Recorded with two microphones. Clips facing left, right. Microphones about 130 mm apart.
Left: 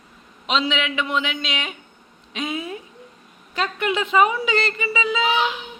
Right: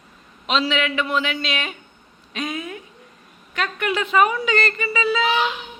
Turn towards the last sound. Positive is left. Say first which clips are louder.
# right 1 dB
turn(degrees=15)  # may be behind; listen again after turning